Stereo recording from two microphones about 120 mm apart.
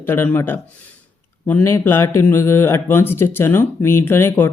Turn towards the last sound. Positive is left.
turn(degrees=20)  # may be behind; listen again after turning